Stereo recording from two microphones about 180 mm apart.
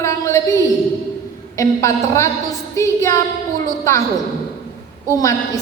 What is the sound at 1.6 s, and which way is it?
A woman's voice, 15° left (ahead or behind).